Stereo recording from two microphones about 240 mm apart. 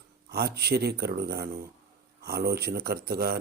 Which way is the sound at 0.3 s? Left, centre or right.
Right.